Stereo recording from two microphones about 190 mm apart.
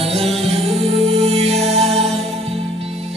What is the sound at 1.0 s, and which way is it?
Music, 35° right (ahead or behind).